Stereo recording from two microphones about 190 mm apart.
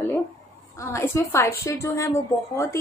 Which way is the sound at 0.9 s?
10° left (ahead or behind).